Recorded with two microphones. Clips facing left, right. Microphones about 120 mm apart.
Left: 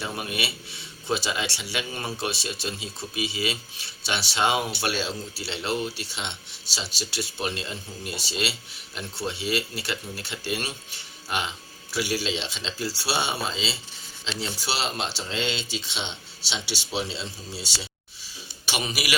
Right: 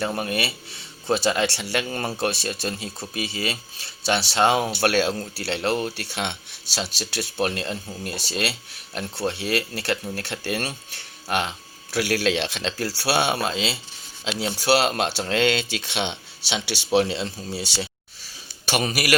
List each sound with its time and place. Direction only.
0.0 s speech: 45° right (ahead or behind)